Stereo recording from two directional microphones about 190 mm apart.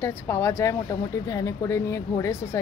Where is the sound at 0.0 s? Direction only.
15° left (ahead or behind).